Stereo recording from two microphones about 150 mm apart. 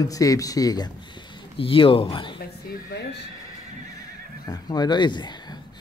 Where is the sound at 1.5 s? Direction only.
35° left (ahead or behind).